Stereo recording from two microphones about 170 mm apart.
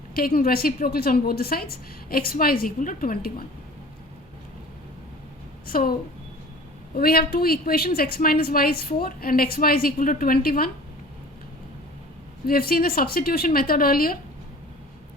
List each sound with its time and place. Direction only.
0.1 s a woman's voice: 60° left (ahead or behind)
5.6 s a woman's voice: 60° left (ahead or behind)
12.5 s a woman's voice: 60° left (ahead or behind)